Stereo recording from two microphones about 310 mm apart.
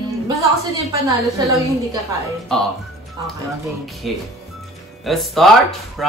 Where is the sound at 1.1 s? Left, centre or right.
Centre.